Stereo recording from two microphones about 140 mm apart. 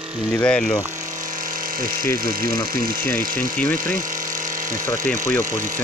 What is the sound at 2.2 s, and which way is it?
Speech, 90° right.